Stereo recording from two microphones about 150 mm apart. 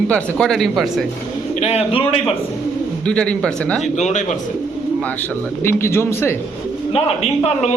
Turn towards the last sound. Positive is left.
turn(degrees=45)  # may be behind; listen again after turning